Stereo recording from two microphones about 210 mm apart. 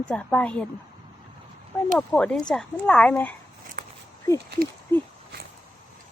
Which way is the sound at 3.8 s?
50° right (ahead or behind).